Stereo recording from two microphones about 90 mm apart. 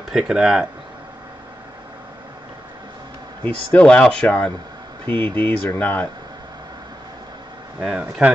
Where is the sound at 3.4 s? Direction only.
15° left (ahead or behind).